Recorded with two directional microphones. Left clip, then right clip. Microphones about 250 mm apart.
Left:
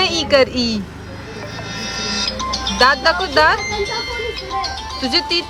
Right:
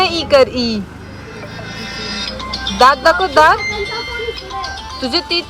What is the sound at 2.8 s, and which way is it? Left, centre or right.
Speech, centre.